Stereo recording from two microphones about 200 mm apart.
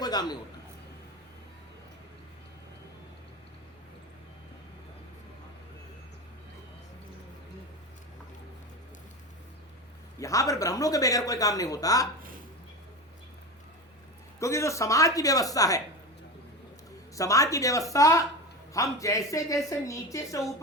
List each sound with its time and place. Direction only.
0.0 s a man's voice: 20° left (ahead or behind)
10.2 s speech: 15° left (ahead or behind)
14.3 s speech: 15° left (ahead or behind)
17.2 s speech: 15° left (ahead or behind)